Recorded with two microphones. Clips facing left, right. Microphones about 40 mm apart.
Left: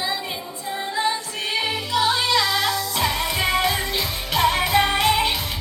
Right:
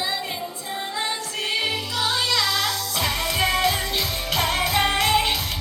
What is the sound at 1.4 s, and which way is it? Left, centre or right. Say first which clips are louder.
Music: even; left.